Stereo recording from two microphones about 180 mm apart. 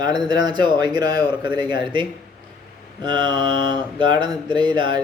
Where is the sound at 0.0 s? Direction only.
20° right (ahead or behind).